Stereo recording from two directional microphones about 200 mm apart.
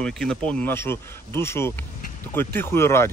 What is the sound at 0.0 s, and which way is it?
Speech, 5° left (ahead or behind).